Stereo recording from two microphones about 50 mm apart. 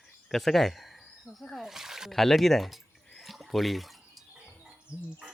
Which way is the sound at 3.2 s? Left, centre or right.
Centre.